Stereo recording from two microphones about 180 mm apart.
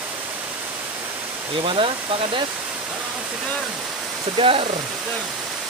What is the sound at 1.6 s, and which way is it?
Speech, 30° right (ahead or behind).